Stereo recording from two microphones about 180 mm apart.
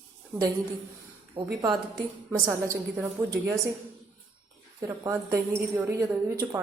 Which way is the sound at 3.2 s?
15° right (ahead or behind).